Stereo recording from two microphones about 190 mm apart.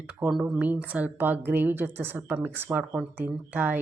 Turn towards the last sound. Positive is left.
turn(degrees=-10)  # may be behind; listen again after turning